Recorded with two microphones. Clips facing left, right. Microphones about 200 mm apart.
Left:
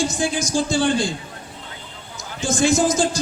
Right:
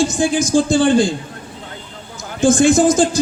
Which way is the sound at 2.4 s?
50° right (ahead or behind).